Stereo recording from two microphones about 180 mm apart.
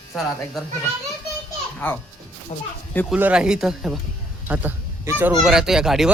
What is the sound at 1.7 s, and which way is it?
Speech, 10° left (ahead or behind).